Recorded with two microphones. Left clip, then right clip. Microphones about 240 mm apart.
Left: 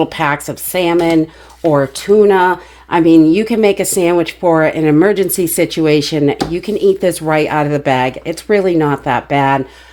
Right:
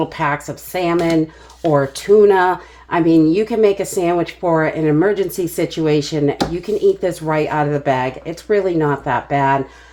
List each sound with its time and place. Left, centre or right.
0.0 s speech: left